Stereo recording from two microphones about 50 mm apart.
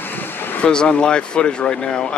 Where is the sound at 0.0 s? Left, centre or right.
Left.